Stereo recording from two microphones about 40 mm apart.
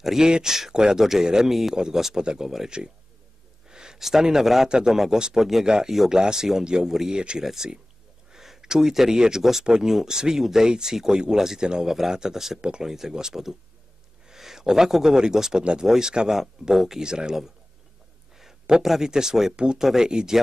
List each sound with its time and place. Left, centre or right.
0.0 s speech: centre
17.0 s speech: right
18.9 s speech: centre
19.5 s speech: right
19.8 s speech: centre
20.1 s speech: right